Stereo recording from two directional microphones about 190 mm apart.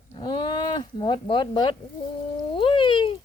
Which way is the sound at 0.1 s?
25° left (ahead or behind).